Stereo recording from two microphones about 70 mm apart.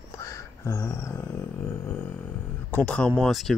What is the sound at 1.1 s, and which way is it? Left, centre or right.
Speech, left.